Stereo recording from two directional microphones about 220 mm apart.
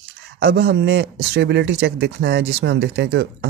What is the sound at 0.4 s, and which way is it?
Speech, 45° right (ahead or behind).